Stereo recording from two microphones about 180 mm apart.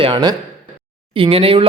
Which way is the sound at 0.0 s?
25° right (ahead or behind).